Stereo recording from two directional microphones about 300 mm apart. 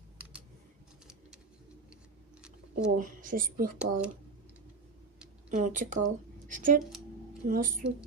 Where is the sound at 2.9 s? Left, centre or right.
Right.